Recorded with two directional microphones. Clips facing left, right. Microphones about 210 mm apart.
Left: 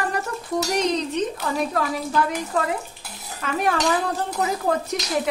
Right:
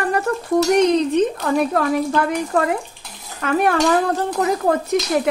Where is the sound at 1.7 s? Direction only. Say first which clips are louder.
Right 6 dB; 55° right (ahead or behind).